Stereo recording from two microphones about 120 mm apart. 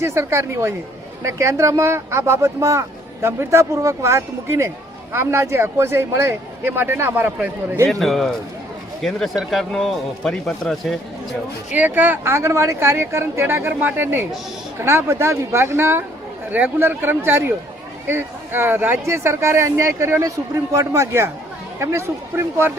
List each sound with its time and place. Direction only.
0.0 s speech: 20° right (ahead or behind)
7.9 s speech: centre (ahead or behind)
11.7 s speech: 15° right (ahead or behind)